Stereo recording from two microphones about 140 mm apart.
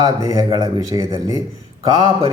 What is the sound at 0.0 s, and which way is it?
Speech, 25° right (ahead or behind).